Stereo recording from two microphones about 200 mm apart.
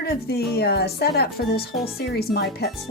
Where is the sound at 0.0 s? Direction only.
50° left (ahead or behind).